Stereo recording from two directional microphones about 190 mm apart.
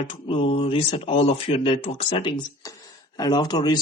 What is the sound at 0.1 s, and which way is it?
Speech, 30° left (ahead or behind).